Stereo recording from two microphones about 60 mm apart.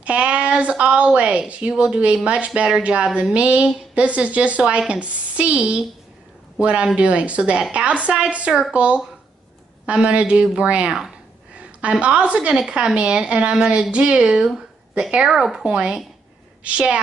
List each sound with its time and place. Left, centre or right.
0.0 s a woman's voice: centre
10.9 s a woman's voice: centre
11.5 s a woman's voice: right